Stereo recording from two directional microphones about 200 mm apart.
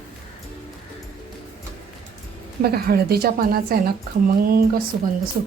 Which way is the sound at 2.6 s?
50° right (ahead or behind).